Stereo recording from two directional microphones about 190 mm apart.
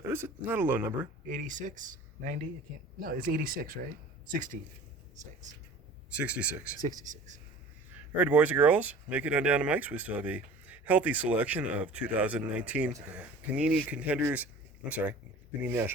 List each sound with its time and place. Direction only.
0.1 s speech: 10° right (ahead or behind)
1.3 s speech: 40° right (ahead or behind)
6.1 s speech: 5° right (ahead or behind)
6.8 s speech: 40° right (ahead or behind)
8.1 s speech: 10° right (ahead or behind)